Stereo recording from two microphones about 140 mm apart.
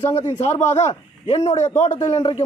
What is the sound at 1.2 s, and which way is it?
Speech, 55° left (ahead or behind).